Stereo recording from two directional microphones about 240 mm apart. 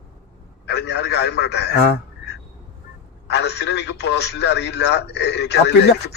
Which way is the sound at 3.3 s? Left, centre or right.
Left.